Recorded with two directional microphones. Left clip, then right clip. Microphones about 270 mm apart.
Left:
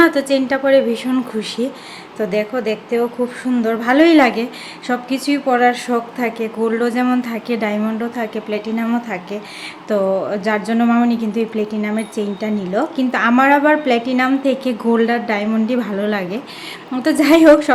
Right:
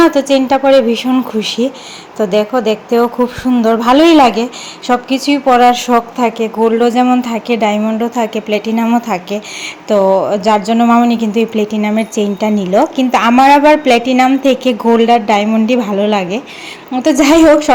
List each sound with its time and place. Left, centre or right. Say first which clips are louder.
0.0 s speech: right 4 dB; centre